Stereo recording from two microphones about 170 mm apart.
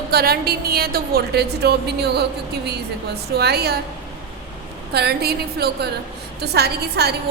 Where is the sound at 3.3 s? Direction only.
70° right (ahead or behind).